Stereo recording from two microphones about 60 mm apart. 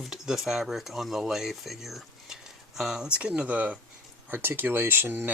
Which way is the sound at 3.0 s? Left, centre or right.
Right.